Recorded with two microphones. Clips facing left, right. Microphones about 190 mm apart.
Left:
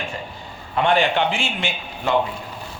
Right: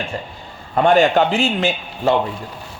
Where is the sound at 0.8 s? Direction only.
45° right (ahead or behind).